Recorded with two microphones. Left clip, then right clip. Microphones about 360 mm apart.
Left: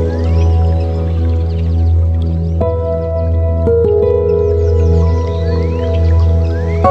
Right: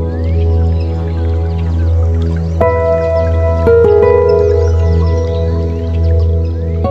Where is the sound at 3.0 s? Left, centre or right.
Right.